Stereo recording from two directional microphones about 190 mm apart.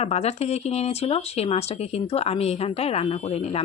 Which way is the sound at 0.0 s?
35° left (ahead or behind).